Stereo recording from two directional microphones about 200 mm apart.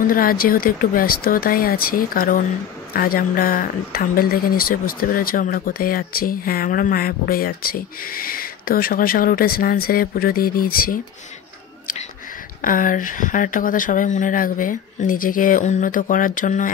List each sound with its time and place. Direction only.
0.0 s speech: 45° left (ahead or behind)
12.6 s speech: 40° left (ahead or behind)